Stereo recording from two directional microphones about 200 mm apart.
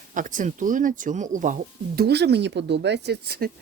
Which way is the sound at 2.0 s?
55° right (ahead or behind).